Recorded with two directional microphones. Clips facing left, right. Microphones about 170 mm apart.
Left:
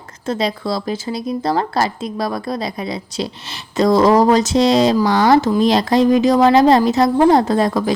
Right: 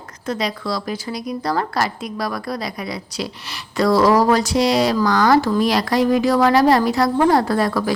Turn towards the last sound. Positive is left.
turn(degrees=20)  # may be behind; listen again after turning